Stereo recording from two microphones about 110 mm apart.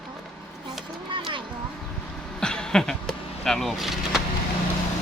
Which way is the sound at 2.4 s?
5° left (ahead or behind).